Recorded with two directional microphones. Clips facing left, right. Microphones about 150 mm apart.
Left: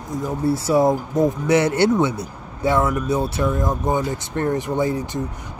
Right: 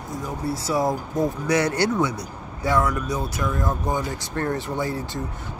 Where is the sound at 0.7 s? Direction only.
25° left (ahead or behind).